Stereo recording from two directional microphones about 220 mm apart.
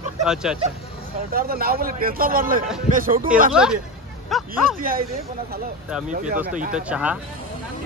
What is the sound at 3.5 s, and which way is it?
Speech, 5° right (ahead or behind).